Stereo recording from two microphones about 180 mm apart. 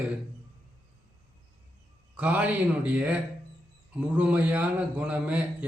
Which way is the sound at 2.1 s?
5° right (ahead or behind).